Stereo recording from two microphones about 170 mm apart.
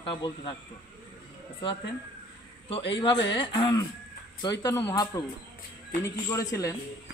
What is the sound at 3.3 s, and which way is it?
Speech, 30° left (ahead or behind).